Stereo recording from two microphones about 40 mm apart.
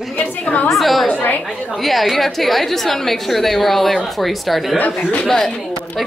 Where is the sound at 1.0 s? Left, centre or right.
Left.